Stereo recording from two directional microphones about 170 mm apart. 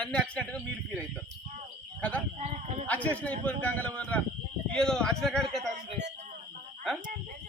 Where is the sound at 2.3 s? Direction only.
40° right (ahead or behind).